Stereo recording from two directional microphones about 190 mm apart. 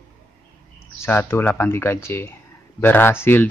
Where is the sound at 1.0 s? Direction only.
10° left (ahead or behind).